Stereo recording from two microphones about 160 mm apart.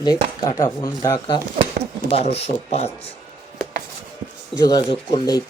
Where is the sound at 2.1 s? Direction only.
40° left (ahead or behind).